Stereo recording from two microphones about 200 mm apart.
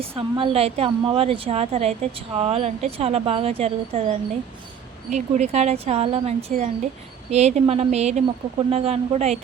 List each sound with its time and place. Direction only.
0.2 s a woman's voice: 25° right (ahead or behind)